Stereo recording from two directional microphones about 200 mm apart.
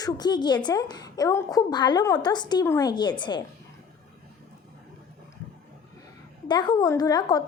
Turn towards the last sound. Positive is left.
turn(degrees=20)  # may be behind; listen again after turning